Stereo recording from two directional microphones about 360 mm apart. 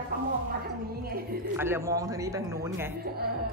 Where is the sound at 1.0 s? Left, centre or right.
Right.